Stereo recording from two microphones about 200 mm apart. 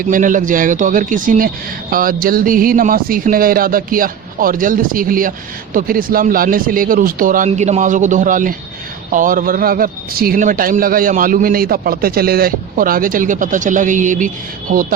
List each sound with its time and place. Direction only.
0.0 s a man's voice: 40° right (ahead or behind)